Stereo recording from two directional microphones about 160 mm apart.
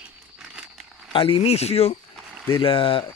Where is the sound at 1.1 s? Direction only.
35° left (ahead or behind).